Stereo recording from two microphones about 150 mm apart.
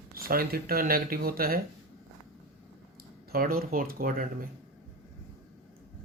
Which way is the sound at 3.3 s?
80° right.